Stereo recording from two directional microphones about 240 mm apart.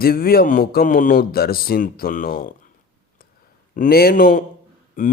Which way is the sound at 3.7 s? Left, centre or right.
Left.